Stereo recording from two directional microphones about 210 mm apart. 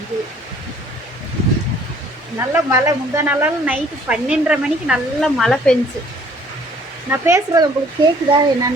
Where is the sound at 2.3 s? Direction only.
15° right (ahead or behind).